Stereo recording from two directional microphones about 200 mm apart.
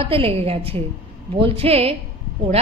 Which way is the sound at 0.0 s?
30° right (ahead or behind).